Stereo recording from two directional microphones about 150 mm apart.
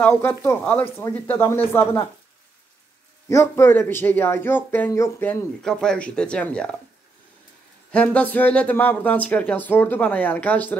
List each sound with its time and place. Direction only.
0.0 s speech: 10° left (ahead or behind)
3.3 s speech: 20° left (ahead or behind)
7.9 s speech: 10° left (ahead or behind)